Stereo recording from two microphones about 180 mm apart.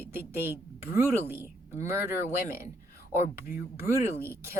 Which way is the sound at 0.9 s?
10° right (ahead or behind).